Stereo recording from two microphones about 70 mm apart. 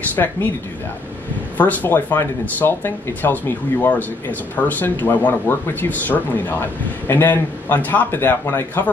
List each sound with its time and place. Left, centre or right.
0.1 s speech: left
1.6 s speech: left